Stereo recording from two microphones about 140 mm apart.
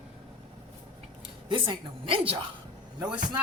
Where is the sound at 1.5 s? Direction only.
35° right (ahead or behind).